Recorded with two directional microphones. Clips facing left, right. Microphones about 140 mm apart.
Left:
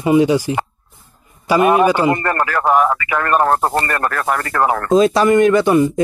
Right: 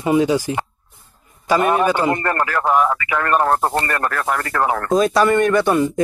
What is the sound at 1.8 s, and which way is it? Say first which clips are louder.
Speech: left 3 dB; 10° left (ahead or behind).